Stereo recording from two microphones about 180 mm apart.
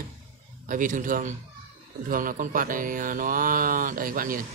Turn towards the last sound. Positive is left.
turn(degrees=-50)  # may be behind; listen again after turning